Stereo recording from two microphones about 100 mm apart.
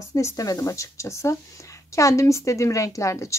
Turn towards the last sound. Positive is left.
turn(degrees=30)  # may be behind; listen again after turning